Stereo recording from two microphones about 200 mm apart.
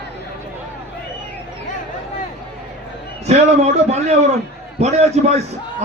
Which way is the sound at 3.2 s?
35° right (ahead or behind).